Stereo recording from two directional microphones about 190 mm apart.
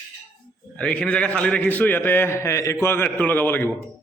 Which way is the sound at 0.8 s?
5° left (ahead or behind).